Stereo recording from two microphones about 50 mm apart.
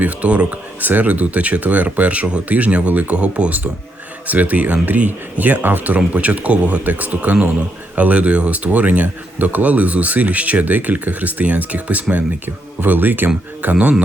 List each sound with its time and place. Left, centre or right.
0.0 s speech: right